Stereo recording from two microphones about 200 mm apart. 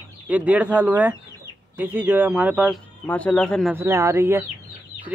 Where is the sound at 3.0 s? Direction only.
5° left (ahead or behind).